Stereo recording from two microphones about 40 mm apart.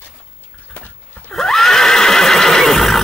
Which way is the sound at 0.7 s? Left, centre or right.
Left.